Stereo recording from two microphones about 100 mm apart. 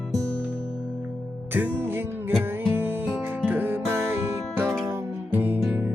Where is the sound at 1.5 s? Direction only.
20° right (ahead or behind).